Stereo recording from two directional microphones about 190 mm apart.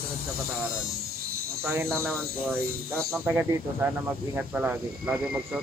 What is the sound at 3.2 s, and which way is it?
Speech, 10° right (ahead or behind).